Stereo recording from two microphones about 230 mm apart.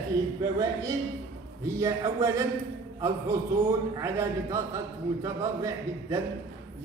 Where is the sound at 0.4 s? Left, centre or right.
Centre.